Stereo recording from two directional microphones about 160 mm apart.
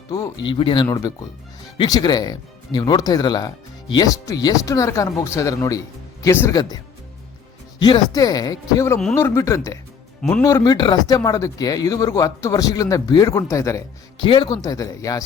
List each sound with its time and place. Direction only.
0.4 s speech: 30° left (ahead or behind)
7.8 s speech: 25° left (ahead or behind)